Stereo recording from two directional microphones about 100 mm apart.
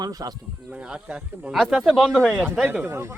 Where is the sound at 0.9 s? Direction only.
5° right (ahead or behind).